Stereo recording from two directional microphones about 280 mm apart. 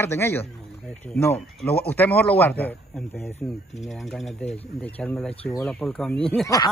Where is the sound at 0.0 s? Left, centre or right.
Centre.